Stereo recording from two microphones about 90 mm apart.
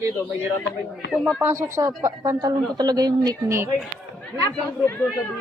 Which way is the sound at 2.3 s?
45° right (ahead or behind).